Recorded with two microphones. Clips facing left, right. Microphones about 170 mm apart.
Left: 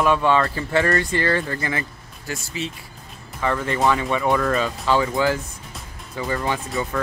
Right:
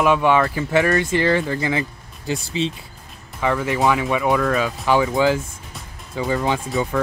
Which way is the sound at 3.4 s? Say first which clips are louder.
Right 2 dB; 10° right (ahead or behind).